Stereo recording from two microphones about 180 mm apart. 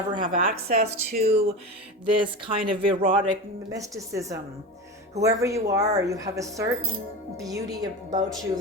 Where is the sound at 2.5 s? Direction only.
30° right (ahead or behind).